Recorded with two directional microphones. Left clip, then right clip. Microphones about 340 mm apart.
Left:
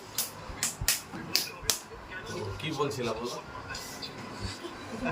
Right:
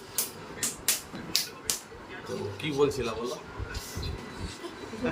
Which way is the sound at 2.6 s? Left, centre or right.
Centre.